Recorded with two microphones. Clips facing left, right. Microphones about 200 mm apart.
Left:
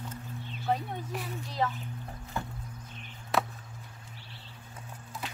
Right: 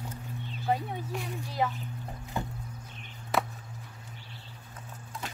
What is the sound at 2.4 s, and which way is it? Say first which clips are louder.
Music: right 2 dB; 20° right (ahead or behind).